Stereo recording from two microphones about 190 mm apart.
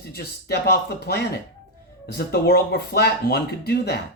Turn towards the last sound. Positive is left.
turn(degrees=60)  # may be behind; listen again after turning